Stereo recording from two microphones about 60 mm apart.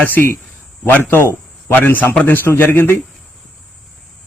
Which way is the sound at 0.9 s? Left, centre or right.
Left.